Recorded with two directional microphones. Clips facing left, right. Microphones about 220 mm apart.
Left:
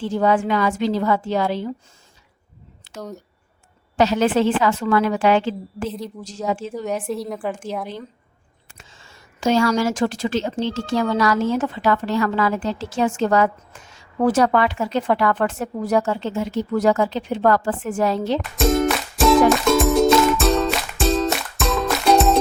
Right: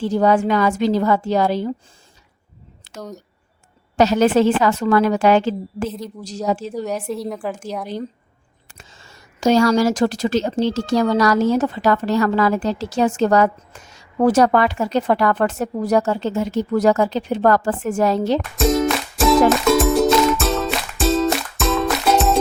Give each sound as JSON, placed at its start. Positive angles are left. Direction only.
{"t": 0.0, "sound": "a woman's voice", "side_deg": -40}
{"t": 2.9, "sound": "a sound", "side_deg": -45}
{"t": 3.9, "sound": "a woman's voice", "side_deg": -40}
{"t": 6.8, "sound": "speech", "side_deg": 0}
{"t": 8.6, "sound": "a woman's voice", "side_deg": -40}
{"t": 18.5, "sound": "music", "side_deg": 0}